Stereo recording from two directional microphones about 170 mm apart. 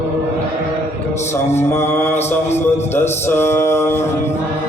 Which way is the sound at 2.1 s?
40° left (ahead or behind).